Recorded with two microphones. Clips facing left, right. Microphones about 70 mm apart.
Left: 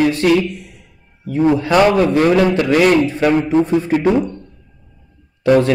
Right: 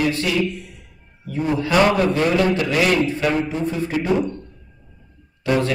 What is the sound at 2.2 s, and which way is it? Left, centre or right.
A man's voice, left.